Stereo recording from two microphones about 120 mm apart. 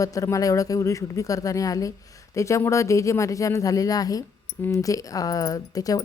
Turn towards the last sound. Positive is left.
turn(degrees=30)  # may be behind; listen again after turning